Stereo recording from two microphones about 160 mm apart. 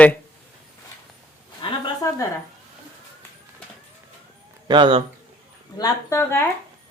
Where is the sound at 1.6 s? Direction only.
30° left (ahead or behind).